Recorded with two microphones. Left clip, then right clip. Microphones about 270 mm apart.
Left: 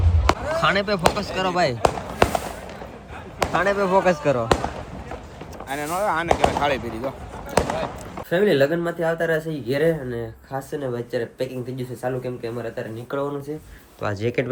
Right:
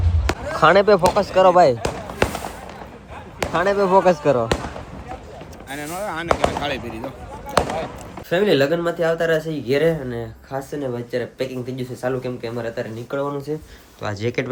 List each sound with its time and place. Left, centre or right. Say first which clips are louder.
0.3 s a sound: right 4 dB; centre
1.2 s speech: right 10 dB; left
1.6 s basketball bounce: right 3 dB; centre
3.4 s speech: right 2 dB; centre
7.6 s chop: right 1 dB; centre
8.3 s speech: right 1 dB; centre